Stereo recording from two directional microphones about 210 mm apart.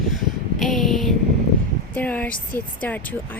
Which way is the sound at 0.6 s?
Centre (ahead or behind).